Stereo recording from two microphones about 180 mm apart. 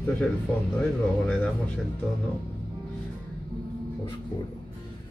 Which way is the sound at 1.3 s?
5° left (ahead or behind).